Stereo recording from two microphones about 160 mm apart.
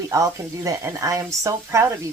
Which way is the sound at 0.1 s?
20° right (ahead or behind).